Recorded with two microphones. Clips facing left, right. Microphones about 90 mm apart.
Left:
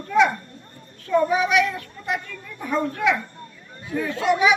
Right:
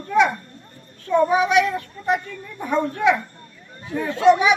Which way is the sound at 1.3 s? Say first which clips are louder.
Right 3 dB; 25° right (ahead or behind).